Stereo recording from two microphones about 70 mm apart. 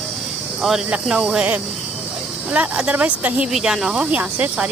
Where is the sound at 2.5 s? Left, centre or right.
Centre.